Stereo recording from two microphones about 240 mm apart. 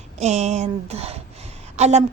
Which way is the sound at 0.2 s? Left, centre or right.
Right.